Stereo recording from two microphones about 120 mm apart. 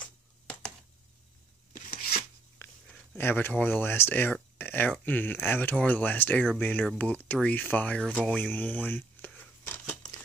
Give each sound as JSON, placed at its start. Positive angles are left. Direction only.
{"t": 0.0, "sound": "a sound", "side_deg": 10}
{"t": 1.7, "sound": "rub", "side_deg": 90}
{"t": 3.2, "sound": "speech", "side_deg": 15}
{"t": 8.3, "sound": "crumpling", "side_deg": 15}